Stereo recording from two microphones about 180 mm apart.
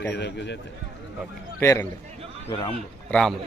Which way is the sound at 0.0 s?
70° left (ahead or behind).